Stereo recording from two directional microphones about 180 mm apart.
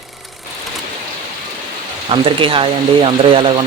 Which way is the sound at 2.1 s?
30° right (ahead or behind).